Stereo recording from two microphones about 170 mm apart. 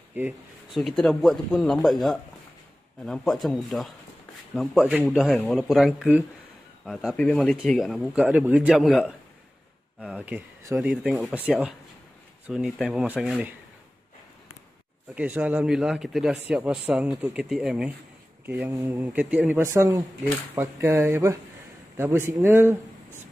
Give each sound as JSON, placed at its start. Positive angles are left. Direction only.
{"t": 0.2, "sound": "speech", "side_deg": -10}
{"t": 0.7, "sound": "speech", "side_deg": 0}
{"t": 12.4, "sound": "speech", "side_deg": 0}
{"t": 15.1, "sound": "speech", "side_deg": -10}
{"t": 18.7, "sound": "speech", "side_deg": -20}
{"t": 19.1, "sound": "speech", "side_deg": -5}